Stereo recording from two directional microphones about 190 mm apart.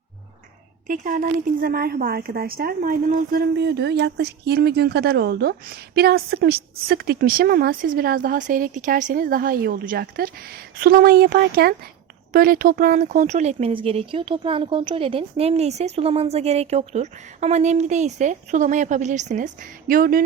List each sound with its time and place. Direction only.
0.9 s a woman's voice: 45° right (ahead or behind)